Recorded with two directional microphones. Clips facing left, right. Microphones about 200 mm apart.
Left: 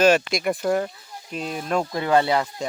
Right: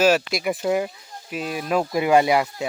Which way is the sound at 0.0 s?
5° right (ahead or behind).